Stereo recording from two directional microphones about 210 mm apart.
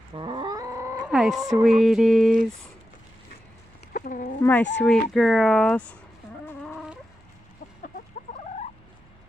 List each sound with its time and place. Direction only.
0.1 s cat: 20° right (ahead or behind)
1.1 s a woman's voice: centre (ahead or behind)
3.9 s speech: 40° left (ahead or behind)
4.4 s speech: 10° left (ahead or behind)
6.7 s chicken: 5° right (ahead or behind)